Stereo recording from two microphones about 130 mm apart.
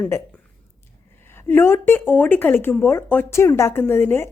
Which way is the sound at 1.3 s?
15° left (ahead or behind).